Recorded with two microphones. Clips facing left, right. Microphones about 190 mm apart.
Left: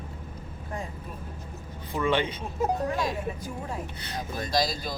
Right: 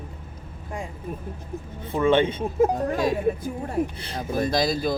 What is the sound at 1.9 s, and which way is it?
Speech, 25° right (ahead or behind).